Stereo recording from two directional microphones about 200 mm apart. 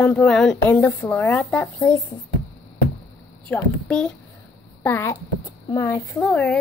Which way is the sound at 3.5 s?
5° left (ahead or behind).